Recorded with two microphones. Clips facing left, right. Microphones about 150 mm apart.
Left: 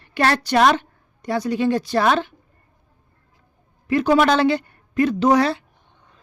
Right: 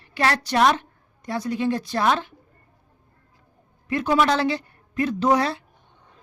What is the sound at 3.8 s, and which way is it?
A woman's voice, 75° left (ahead or behind).